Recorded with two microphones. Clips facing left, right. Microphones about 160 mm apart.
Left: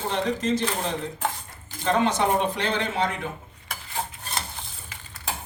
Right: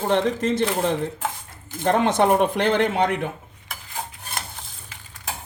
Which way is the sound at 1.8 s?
55° right (ahead or behind).